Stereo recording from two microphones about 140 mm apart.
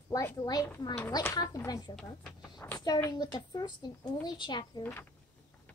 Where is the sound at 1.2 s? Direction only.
25° left (ahead or behind).